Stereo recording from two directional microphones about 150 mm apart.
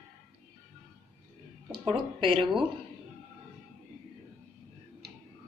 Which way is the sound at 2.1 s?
35° right (ahead or behind).